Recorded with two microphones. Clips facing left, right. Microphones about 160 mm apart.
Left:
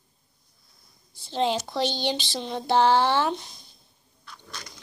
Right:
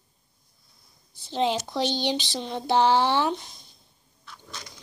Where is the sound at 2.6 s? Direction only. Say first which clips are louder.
Left 1 dB; 15° right (ahead or behind).